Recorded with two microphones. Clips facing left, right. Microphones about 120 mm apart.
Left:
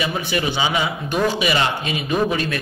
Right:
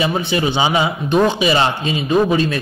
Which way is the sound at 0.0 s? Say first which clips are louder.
Right 4 dB; 25° right (ahead or behind).